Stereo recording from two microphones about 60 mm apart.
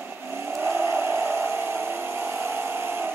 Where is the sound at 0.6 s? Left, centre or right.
Right.